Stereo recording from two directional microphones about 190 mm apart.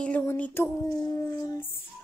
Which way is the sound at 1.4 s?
20° left (ahead or behind).